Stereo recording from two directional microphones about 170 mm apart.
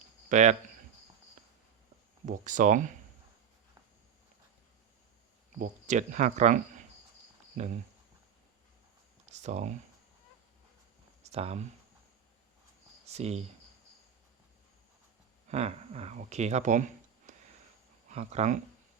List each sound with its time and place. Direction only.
0.3 s speech: 45° right (ahead or behind)
2.2 s speech: 50° right (ahead or behind)
5.5 s speech: 45° right (ahead or behind)
9.2 s a sound: 45° right (ahead or behind)
11.2 s a sound: 40° right (ahead or behind)
13.1 s speech: 40° right (ahead or behind)
15.4 s speech: 40° right (ahead or behind)